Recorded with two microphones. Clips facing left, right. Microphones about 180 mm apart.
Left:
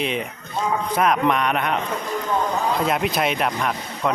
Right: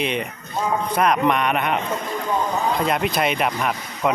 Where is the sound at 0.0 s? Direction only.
Centre (ahead or behind).